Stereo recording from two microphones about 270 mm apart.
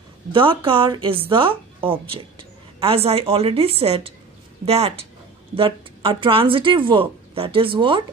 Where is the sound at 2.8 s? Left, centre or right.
Right.